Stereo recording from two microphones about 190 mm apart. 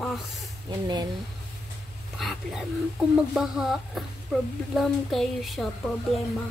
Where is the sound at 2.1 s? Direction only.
Centre (ahead or behind).